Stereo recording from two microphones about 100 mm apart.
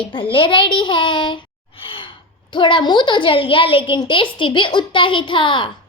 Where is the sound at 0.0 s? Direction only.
55° left (ahead or behind).